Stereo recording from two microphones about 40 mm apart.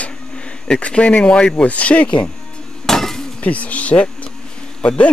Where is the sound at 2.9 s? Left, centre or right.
Centre.